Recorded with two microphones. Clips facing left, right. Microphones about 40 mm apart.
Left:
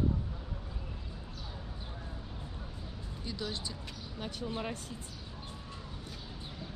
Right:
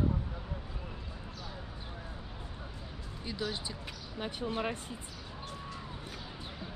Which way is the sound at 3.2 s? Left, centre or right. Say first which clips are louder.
Right 2 dB; centre.